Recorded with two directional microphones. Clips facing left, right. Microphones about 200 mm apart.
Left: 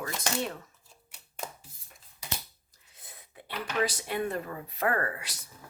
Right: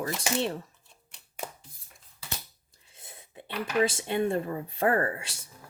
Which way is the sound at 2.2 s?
15° left (ahead or behind).